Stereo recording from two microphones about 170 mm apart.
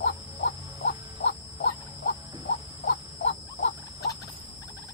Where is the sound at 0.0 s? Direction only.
70° left (ahead or behind).